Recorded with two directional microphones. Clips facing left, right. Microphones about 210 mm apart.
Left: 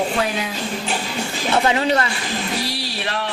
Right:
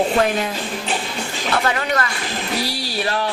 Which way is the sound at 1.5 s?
25° left (ahead or behind).